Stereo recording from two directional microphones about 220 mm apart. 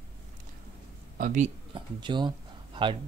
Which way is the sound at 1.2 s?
35° right (ahead or behind).